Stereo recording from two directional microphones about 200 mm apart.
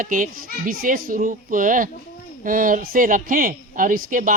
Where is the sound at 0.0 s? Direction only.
40° right (ahead or behind).